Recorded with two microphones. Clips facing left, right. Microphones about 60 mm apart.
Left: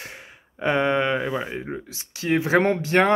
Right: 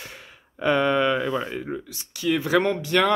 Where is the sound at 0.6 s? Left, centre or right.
Left.